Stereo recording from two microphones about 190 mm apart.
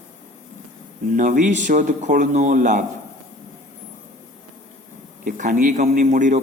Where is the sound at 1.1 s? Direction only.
40° right (ahead or behind).